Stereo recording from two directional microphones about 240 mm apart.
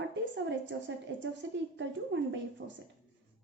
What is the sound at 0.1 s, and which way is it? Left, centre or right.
A woman's voice, right.